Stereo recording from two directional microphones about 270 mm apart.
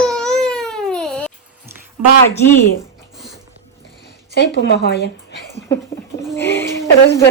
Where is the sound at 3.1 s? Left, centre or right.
Centre.